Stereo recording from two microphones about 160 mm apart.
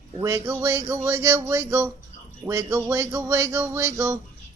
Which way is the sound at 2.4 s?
20° right (ahead or behind).